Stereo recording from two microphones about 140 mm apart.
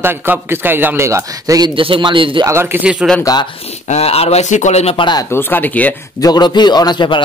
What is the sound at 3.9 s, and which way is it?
A man's voice, 45° left (ahead or behind).